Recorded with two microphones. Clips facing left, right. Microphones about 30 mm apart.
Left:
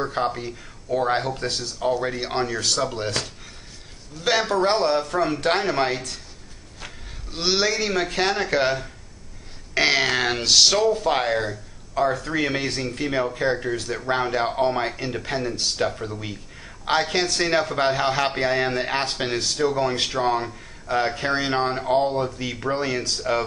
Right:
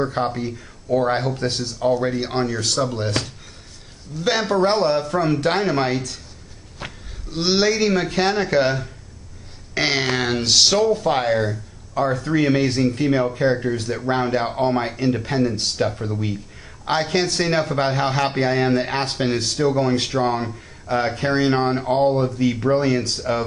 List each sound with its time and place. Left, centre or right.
0.0 s a man's voice: centre
4.2 s a man's voice: centre
6.8 s a sound: right
7.2 s a man's voice: centre